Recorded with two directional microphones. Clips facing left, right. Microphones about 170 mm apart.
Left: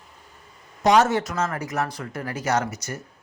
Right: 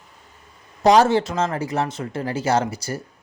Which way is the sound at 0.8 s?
30° right (ahead or behind).